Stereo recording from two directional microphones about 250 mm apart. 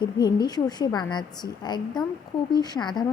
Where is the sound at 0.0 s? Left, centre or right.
Centre.